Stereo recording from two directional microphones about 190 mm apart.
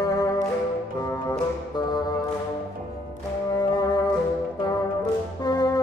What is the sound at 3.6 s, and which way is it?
Music, 20° left (ahead or behind).